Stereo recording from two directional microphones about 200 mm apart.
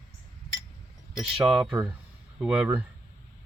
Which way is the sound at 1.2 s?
5° right (ahead or behind).